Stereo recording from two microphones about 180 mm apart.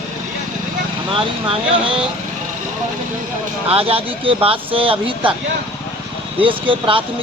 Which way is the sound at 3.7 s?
30° right (ahead or behind).